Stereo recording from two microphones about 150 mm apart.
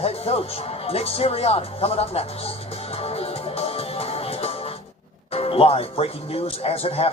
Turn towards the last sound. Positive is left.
turn(degrees=40)  # may be behind; listen again after turning